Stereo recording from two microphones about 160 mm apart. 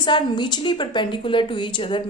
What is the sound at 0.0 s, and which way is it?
A woman's voice, 30° left (ahead or behind).